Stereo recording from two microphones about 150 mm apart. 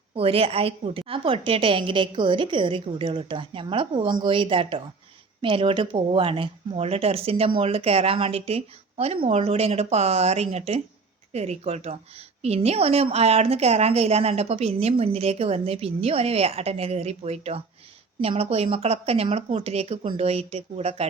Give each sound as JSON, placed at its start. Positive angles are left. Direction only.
{"t": 0.2, "sound": "a woman's voice", "side_deg": -40}